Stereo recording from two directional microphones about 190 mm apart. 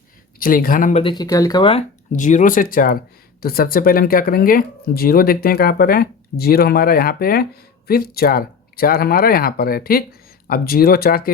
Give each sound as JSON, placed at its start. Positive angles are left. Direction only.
{"t": 0.3, "sound": "speech", "side_deg": 50}
{"t": 1.0, "sound": "speech", "side_deg": 20}
{"t": 2.1, "sound": "speech", "side_deg": 40}